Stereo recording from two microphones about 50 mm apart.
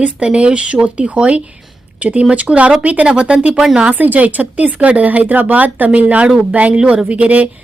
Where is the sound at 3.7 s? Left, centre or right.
Right.